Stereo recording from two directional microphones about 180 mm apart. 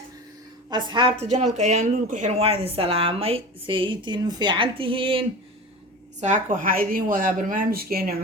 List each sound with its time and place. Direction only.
0.7 s a woman's voice: 25° right (ahead or behind)
1.2 s speech: 40° right (ahead or behind)
6.1 s speech: 45° right (ahead or behind)